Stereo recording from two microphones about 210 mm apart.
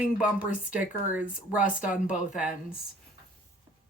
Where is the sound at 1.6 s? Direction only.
40° left (ahead or behind).